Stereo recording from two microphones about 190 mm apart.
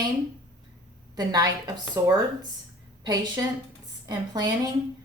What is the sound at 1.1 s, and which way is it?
Speech, 20° right (ahead or behind).